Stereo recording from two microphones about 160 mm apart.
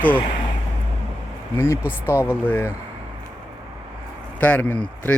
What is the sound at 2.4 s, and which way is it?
Speech, 10° left (ahead or behind).